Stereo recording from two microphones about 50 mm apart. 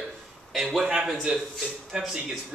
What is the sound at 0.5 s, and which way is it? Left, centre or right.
Speech, centre.